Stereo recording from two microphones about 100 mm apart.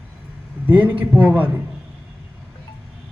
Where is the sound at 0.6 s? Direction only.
20° right (ahead or behind).